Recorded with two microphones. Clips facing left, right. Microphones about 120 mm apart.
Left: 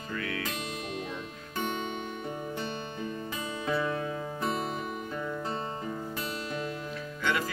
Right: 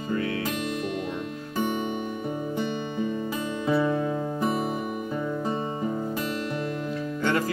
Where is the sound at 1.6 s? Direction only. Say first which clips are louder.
Right 6 dB; 15° right (ahead or behind).